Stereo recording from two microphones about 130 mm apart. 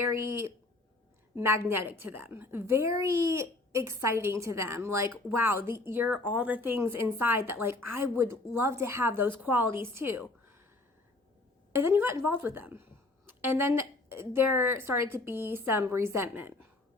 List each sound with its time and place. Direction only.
0.1 s a woman's voice: 20° right (ahead or behind)
11.7 s a woman's voice: 20° right (ahead or behind)